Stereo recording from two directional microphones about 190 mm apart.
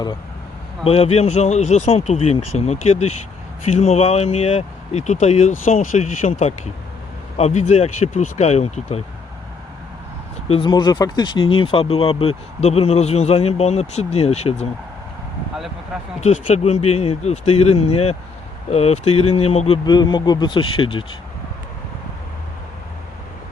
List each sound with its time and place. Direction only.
0.9 s speech: 30° left (ahead or behind)
10.5 s speech: 25° left (ahead or behind)
16.2 s speech: 40° left (ahead or behind)